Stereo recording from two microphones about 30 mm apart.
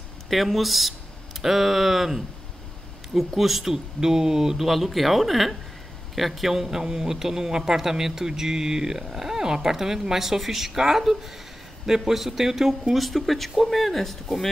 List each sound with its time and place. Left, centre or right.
0.3 s speech: centre
3.3 s speech: centre
3.7 s speech: centre
4.6 s speech: centre
12.9 s speech: centre